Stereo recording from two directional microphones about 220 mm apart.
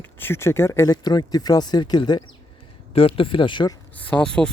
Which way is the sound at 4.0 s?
5° left (ahead or behind).